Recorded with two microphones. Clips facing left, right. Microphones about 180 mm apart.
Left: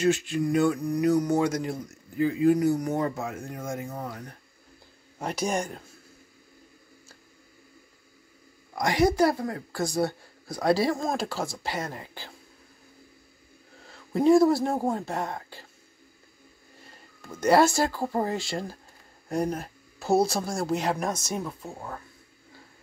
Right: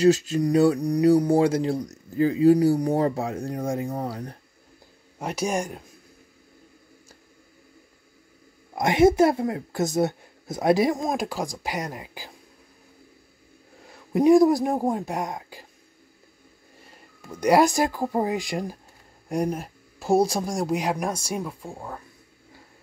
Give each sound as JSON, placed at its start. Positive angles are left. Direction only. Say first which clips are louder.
{"t": 0.0, "sound": "speech", "louder": "right 5 dB", "side_deg": -40}
{"t": 5.2, "sound": "speech", "louder": "right 2 dB", "side_deg": -10}
{"t": 8.7, "sound": "speech", "louder": "right 5 dB", "side_deg": -25}
{"t": 13.8, "sound": "speech", "louder": "right 3 dB", "side_deg": -15}
{"t": 17.2, "sound": "speech", "louder": "right 2 dB", "side_deg": -15}